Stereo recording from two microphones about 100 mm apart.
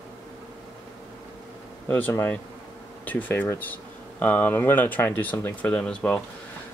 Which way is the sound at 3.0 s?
15° left (ahead or behind).